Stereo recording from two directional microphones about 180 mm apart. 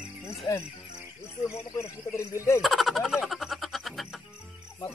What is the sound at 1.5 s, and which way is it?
Speech, 15° left (ahead or behind).